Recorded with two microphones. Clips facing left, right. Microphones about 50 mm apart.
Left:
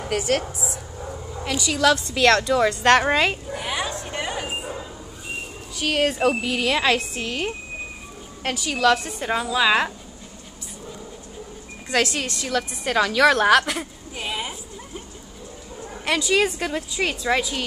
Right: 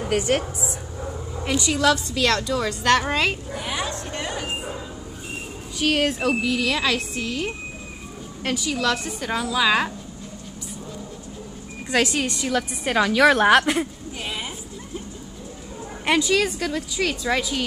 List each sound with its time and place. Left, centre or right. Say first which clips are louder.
1.4 s speech: right 2 dB; centre
2.0 s a woman's voice: left 4 dB; left
3.5 s a sound: left 1 dB; centre
5.8 s speech: even; centre
6.2 s a woman's voice: left 1 dB; left
7.0 s a woman's voice: even; left
8.6 s a woman's voice: left 5 dB; left
8.9 s a woman's voice: left 3 dB; centre
11.9 s a woman's voice: right 1 dB; centre
14.1 s a sound: left 3 dB; centre
16.3 s a woman's voice: left 1 dB; centre